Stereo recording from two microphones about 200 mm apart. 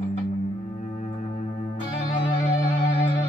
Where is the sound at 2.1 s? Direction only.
25° left (ahead or behind).